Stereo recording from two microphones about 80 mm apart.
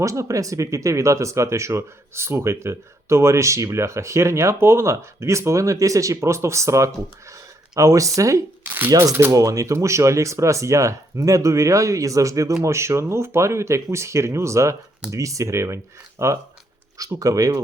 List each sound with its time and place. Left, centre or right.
0.0 s speech: right
8.6 s shuffling cards: right
9.3 s speech: right
17.0 s speech: right